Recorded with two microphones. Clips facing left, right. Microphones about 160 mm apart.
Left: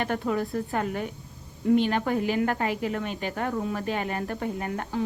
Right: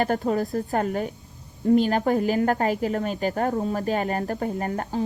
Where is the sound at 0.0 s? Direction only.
40° right (ahead or behind).